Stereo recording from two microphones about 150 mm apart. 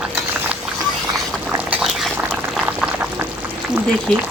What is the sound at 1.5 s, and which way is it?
Liquid, 5° right (ahead or behind).